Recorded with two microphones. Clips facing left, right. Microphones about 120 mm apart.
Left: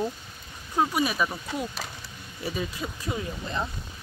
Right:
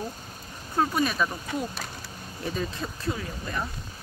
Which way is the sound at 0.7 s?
10° left (ahead or behind).